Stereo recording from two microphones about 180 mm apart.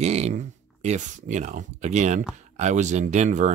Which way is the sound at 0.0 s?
35° right (ahead or behind).